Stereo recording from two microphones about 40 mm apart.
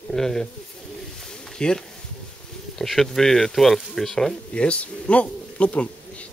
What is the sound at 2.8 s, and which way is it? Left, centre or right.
Speech, centre.